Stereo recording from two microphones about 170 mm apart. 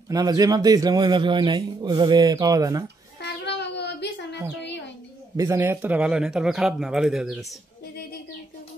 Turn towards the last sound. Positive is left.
turn(degrees=0)  # may be behind; listen again after turning